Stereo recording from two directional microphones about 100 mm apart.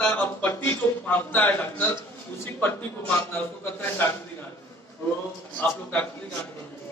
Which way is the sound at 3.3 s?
20° left (ahead or behind).